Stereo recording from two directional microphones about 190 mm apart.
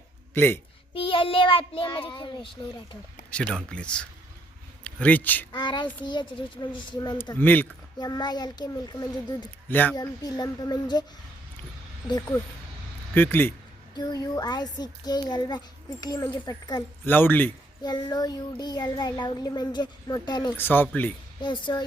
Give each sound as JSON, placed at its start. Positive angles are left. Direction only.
{"t": 0.3, "sound": "speech", "side_deg": 10}
{"t": 0.9, "sound": "a child's voice", "side_deg": 30}
{"t": 3.2, "sound": "speech", "side_deg": 5}
{"t": 5.5, "sound": "a child's voice", "side_deg": 25}
{"t": 7.3, "sound": "speech", "side_deg": 10}
{"t": 7.9, "sound": "a child's voice", "side_deg": 20}
{"t": 9.6, "sound": "speech", "side_deg": 10}
{"t": 9.9, "sound": "a child's voice", "side_deg": 20}
{"t": 13.1, "sound": "speech", "side_deg": 10}
{"t": 13.9, "sound": "a child's voice", "side_deg": 20}
{"t": 17.1, "sound": "speech", "side_deg": 10}
{"t": 17.8, "sound": "a child's voice", "side_deg": 20}
{"t": 20.6, "sound": "speech", "side_deg": 10}
{"t": 21.4, "sound": "a child's voice", "side_deg": 25}